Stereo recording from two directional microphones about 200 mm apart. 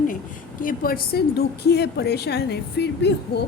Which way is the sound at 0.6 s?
45° left (ahead or behind).